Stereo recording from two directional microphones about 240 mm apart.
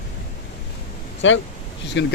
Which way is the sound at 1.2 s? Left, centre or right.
Left.